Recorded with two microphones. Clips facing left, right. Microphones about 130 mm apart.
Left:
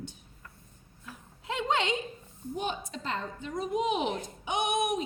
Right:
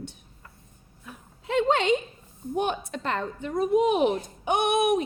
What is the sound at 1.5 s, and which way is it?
A woman's voice, 60° right (ahead or behind).